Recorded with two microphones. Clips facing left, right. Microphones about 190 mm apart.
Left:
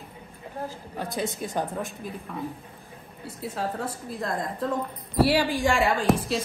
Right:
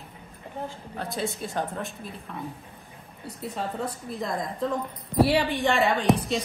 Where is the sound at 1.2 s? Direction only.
15° left (ahead or behind).